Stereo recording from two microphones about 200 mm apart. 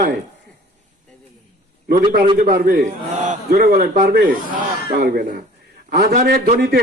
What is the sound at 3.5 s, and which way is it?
A man's voice, 50° right (ahead or behind).